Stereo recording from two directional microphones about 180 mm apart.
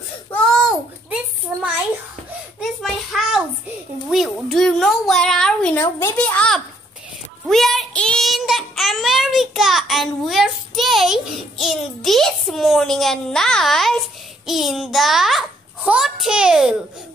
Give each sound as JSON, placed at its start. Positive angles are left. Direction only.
{"t": 0.3, "sound": "child singing", "side_deg": 5}
{"t": 2.6, "sound": "a sound", "side_deg": 0}
{"t": 7.4, "sound": "child singing", "side_deg": 0}